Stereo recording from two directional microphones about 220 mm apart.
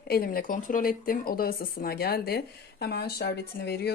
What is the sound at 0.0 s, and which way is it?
Speech, 45° left (ahead or behind).